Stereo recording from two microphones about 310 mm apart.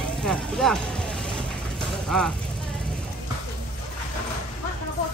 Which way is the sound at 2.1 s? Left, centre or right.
Centre.